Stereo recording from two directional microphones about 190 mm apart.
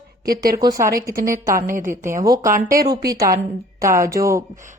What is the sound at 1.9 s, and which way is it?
Speech, 15° right (ahead or behind).